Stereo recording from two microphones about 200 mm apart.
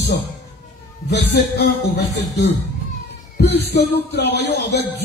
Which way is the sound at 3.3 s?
55° left (ahead or behind).